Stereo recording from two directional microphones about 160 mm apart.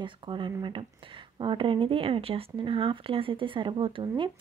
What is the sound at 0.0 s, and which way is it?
Speech, 30° right (ahead or behind).